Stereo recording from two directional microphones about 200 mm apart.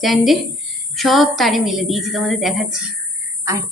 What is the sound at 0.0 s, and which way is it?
A woman's voice, centre (ahead or behind).